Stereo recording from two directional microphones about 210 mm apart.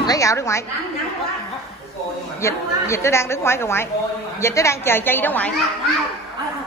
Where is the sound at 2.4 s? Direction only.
15° left (ahead or behind).